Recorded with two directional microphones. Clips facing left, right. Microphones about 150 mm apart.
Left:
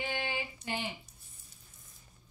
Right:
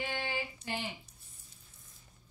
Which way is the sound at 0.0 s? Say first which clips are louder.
Left 1 dB; 15° left (ahead or behind).